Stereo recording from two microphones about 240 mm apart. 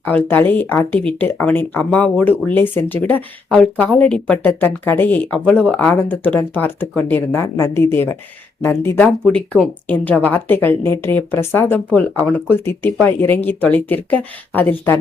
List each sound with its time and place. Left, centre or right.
0.3 s speech: centre